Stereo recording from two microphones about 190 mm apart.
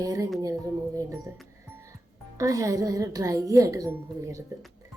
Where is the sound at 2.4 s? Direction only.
15° right (ahead or behind).